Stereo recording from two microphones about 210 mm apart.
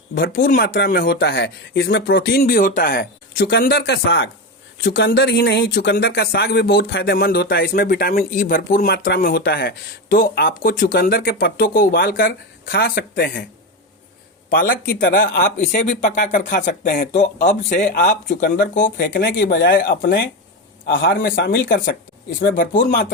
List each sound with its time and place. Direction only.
0.1 s speech: 45° left (ahead or behind)
14.5 s speech: 45° left (ahead or behind)